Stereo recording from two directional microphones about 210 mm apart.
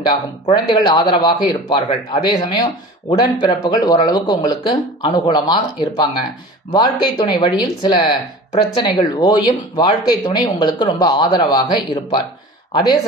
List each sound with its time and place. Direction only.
0.1 s speech: 20° left (ahead or behind)